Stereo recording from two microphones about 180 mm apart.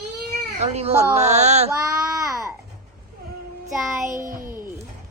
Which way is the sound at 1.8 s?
20° right (ahead or behind).